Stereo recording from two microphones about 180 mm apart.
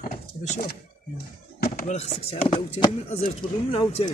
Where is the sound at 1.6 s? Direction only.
45° left (ahead or behind).